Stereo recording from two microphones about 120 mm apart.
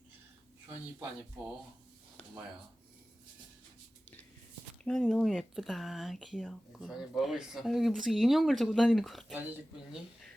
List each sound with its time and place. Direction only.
4.8 s speech: 5° left (ahead or behind)
9.3 s speech: 15° right (ahead or behind)